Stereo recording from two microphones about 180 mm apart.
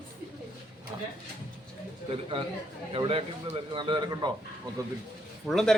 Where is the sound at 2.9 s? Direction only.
30° right (ahead or behind).